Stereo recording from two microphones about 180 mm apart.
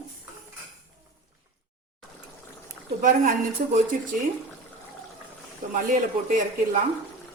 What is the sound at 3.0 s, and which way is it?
Speech, 45° right (ahead or behind).